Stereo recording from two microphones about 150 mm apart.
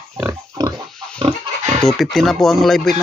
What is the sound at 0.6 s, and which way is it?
Pig, 25° right (ahead or behind).